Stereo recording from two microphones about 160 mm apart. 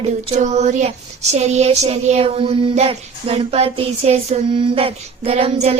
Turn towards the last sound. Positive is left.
turn(degrees=-40)  # may be behind; listen again after turning